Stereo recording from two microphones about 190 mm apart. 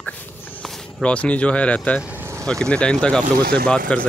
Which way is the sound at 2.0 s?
10° right (ahead or behind).